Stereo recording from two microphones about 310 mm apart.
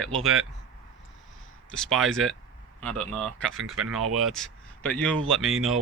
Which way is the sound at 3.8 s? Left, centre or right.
Right.